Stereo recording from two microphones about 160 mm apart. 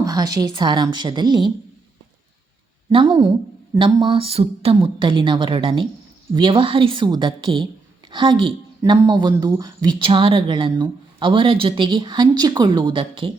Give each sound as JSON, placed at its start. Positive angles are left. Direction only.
{"t": 0.0, "sound": "speech", "side_deg": -25}
{"t": 2.9, "sound": "a woman's voice", "side_deg": -30}